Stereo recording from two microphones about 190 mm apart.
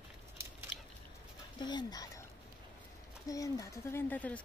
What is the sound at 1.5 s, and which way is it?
Speech, 20° left (ahead or behind).